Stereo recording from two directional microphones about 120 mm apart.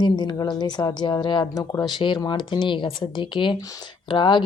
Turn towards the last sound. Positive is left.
turn(degrees=40)  # may be behind; listen again after turning